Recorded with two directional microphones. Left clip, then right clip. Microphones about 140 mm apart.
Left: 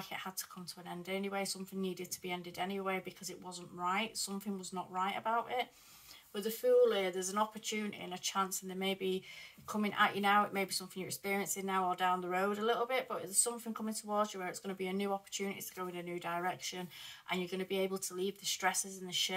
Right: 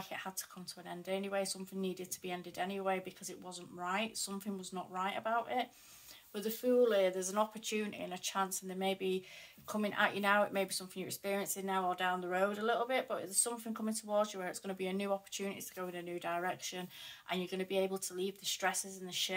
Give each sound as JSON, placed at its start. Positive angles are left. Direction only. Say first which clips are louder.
{"t": 0.1, "sound": "speech", "louder": "even", "side_deg": -35}